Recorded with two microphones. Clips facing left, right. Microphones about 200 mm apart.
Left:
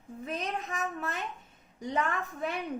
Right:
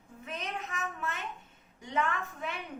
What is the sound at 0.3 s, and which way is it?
A woman's voice, 35° left (ahead or behind).